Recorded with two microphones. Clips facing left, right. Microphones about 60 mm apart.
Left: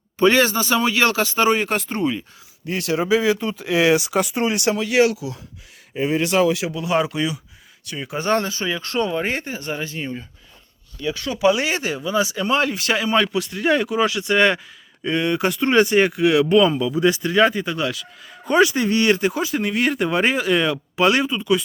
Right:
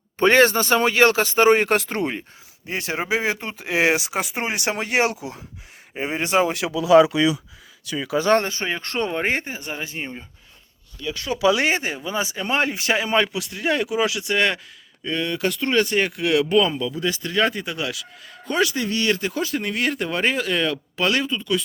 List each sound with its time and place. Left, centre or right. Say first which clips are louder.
0.2 s speech: right 1 dB; right
1.6 s speech: right 1 dB; right
2.6 s speech: left 5 dB; right
6.7 s speech: right 7 dB; right
8.4 s speech: left 1 dB; right
9.6 s speech: left 4 dB; centre
10.0 s speech: left 3 dB; right
11.3 s speech: even; centre
11.7 s speech: left 2 dB; right
12.7 s speech: left 1 dB; centre
15.0 s speech: left 4 dB; left
17.4 s speech: left 4 dB; centre
18.4 s speech: left 5 dB; left
19.4 s speech: left 3 dB; centre